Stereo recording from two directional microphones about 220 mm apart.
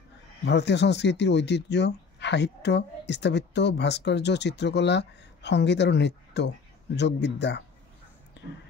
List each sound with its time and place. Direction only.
0.5 s speech: 50° left (ahead or behind)